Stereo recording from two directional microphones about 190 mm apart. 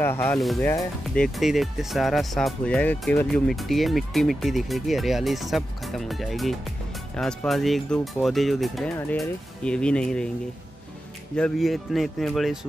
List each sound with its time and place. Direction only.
0.0 s speech: 10° left (ahead or behind)
0.4 s speech: centre (ahead or behind)
11.3 s speech: 5° left (ahead or behind)